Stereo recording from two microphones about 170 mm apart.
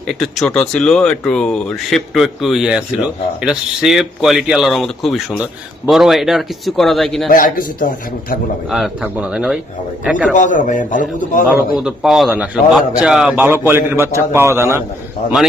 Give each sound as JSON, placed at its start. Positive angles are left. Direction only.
{"t": 0.1, "sound": "speech", "side_deg": 0}
{"t": 7.3, "sound": "a man's voice", "side_deg": 55}
{"t": 8.7, "sound": "speech", "side_deg": -5}
{"t": 10.3, "sound": "a man's voice", "side_deg": 50}
{"t": 11.4, "sound": "a man's voice", "side_deg": -5}